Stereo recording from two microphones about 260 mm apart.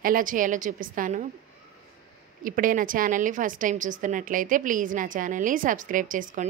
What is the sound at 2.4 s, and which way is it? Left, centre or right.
A woman's voice, right.